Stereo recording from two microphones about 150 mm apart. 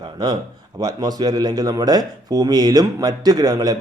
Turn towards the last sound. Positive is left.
turn(degrees=-25)  # may be behind; listen again after turning